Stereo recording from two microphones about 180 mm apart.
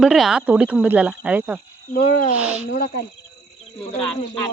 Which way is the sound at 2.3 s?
5° right (ahead or behind).